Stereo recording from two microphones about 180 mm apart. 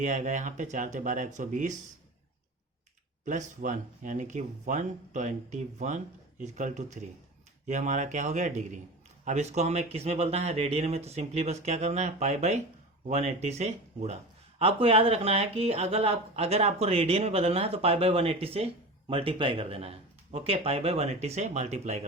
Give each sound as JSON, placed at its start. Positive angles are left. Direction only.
{"t": 0.0, "sound": "speech", "side_deg": -40}
{"t": 3.2, "sound": "speech", "side_deg": -45}